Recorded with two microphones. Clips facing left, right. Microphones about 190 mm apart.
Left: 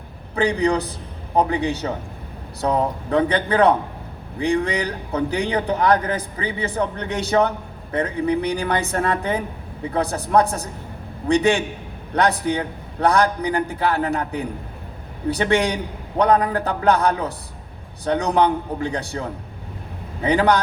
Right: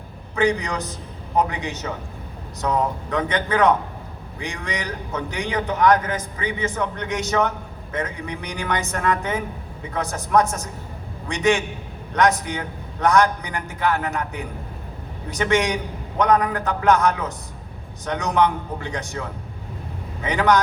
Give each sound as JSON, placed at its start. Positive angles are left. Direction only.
{"t": 0.3, "sound": "a man's voice", "side_deg": 35}